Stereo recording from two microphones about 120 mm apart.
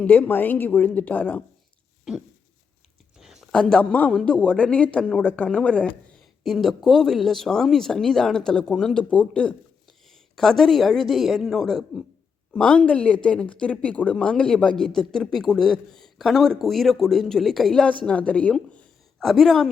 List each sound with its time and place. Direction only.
0.0 s speech: 15° left (ahead or behind)
3.2 s a sound: 5° right (ahead or behind)
3.5 s speech: 5° left (ahead or behind)